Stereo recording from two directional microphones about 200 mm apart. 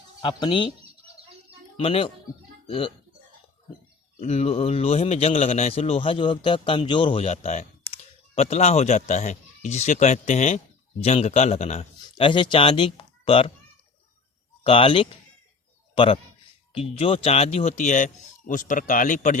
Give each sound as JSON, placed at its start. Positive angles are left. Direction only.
{"t": 0.2, "sound": "a man's voice", "side_deg": 20}
{"t": 1.7, "sound": "speech", "side_deg": 30}
{"t": 4.2, "sound": "a man's voice", "side_deg": 35}
{"t": 14.6, "sound": "a man's voice", "side_deg": 30}